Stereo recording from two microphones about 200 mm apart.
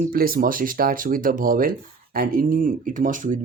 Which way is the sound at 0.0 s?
45° right (ahead or behind).